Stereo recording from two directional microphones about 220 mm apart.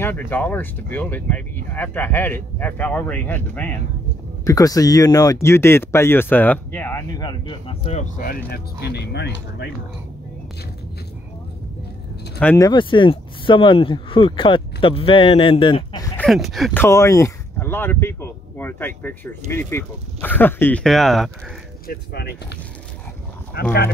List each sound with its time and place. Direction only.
0.0 s speech: 10° left (ahead or behind); by 9.7 s 50° left (ahead or behind)
12.4 s speech: 10° left (ahead or behind)
16.3 s speech: centre (ahead or behind)
16.8 s speech: 15° left (ahead or behind)
21.8 s speech: 45° left (ahead or behind)
23.5 s speech: 45° left (ahead or behind)